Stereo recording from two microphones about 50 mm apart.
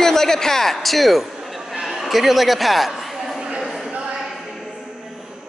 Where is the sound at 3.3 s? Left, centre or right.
Centre.